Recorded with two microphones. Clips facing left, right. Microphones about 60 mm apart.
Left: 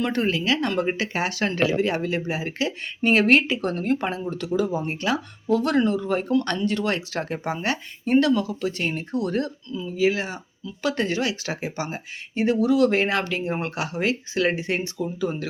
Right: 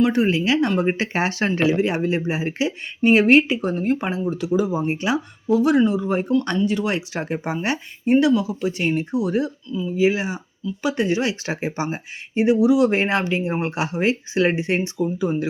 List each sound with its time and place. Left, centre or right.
0.0 s speech: centre
2.6 s speech: centre
10.0 s speech: centre
11.2 s speech: right